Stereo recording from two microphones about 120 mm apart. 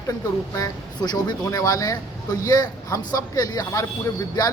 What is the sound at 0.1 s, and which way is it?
A man's voice, 25° left (ahead or behind).